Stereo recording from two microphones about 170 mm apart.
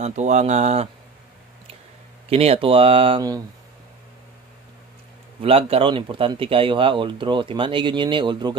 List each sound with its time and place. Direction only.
0.0 s speech: 45° right (ahead or behind)
2.2 s speech: 35° right (ahead or behind)
5.4 s speech: 35° right (ahead or behind)